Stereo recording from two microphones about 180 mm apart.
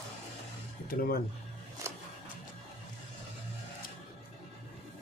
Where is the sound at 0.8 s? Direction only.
55° left (ahead or behind).